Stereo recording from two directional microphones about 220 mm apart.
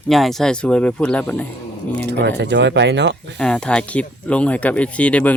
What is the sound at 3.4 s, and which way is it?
Speech, 5° left (ahead or behind).